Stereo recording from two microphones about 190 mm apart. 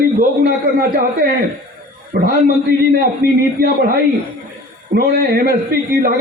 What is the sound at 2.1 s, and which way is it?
A man's voice, 55° right (ahead or behind).